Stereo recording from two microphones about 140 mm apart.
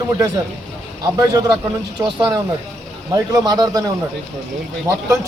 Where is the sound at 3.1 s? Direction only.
25° right (ahead or behind).